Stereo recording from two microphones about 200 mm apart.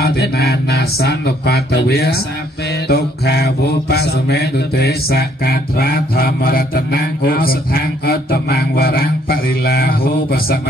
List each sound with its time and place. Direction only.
0.0 s mantra: 50° left (ahead or behind)